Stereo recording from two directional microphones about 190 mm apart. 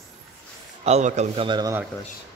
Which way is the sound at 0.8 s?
35° right (ahead or behind).